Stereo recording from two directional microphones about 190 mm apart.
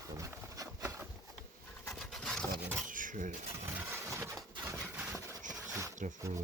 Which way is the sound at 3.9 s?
15° right (ahead or behind).